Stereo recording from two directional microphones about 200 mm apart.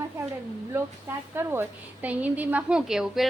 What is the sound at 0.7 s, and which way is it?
A woman's voice, 10° right (ahead or behind).